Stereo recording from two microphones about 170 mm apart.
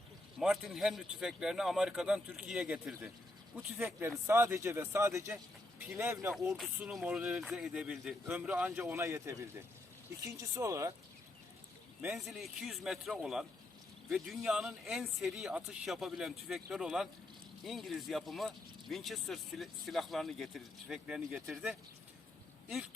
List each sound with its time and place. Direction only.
0.3 s speech: centre (ahead or behind)
6.5 s speech: centre (ahead or behind); by 10.9 s 20° right (ahead or behind)
12.1 s speech: centre (ahead or behind)